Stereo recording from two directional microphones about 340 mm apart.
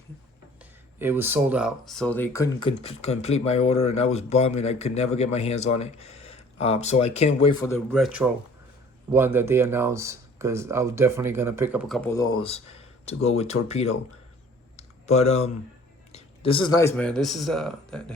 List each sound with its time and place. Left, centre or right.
0.6 s speech: centre
7.9 s speech: centre
14.8 s clicking: centre
16.1 s speech: centre